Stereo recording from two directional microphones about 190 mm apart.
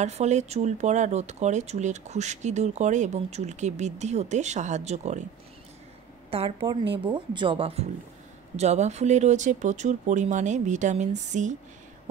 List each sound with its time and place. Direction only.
0.0 s speech: 35° right (ahead or behind)
6.3 s a woman's voice: 30° right (ahead or behind)